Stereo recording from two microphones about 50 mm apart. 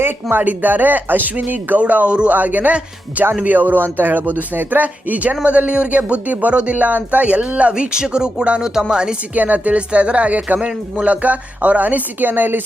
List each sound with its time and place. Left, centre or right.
0.0 s speech: right
1.8 s speech: right
9.3 s speech: right